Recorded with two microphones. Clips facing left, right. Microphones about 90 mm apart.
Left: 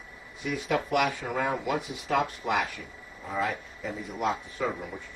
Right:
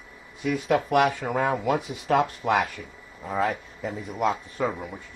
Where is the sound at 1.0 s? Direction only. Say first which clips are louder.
Right 5 dB; 50° right (ahead or behind).